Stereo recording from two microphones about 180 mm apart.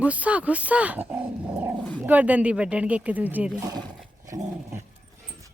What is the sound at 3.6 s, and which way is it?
Speech, 25° right (ahead or behind).